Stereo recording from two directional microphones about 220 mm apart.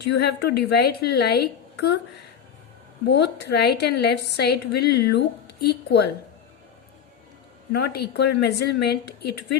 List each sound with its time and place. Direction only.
0.0 s a woman's voice: 50° left (ahead or behind)
3.1 s a woman's voice: 50° left (ahead or behind)
7.7 s a woman's voice: 50° left (ahead or behind)